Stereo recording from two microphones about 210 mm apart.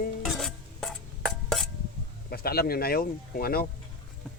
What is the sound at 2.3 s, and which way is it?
Speech, 45° left (ahead or behind).